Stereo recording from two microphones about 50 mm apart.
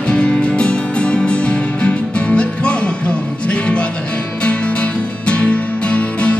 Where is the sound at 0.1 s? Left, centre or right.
Left.